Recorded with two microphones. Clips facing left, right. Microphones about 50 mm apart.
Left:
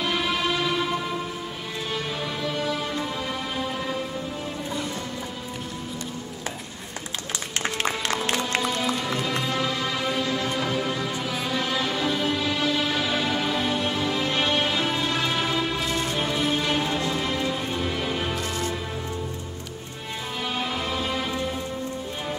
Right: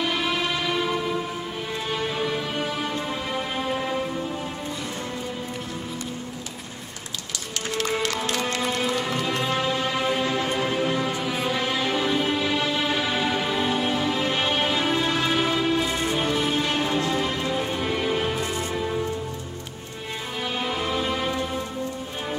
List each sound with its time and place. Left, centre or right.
0.0 s music: centre
2.5 s music: right
7.7 s music: left
8.6 s music: right
16.2 s music: centre; by 18.7 s right
20.5 s music: centre